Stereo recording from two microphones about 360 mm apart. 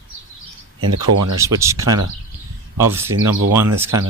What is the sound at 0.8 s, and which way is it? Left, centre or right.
Speech, right.